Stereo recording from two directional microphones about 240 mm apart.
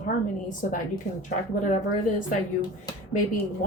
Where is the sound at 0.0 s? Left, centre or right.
Left.